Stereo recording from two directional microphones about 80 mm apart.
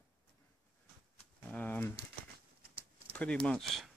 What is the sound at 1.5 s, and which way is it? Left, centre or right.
Speech, left.